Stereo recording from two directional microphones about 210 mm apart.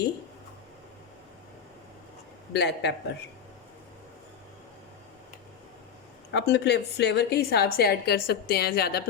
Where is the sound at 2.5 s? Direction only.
55° left (ahead or behind).